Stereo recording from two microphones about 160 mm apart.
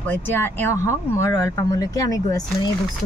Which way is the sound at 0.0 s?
15° left (ahead or behind).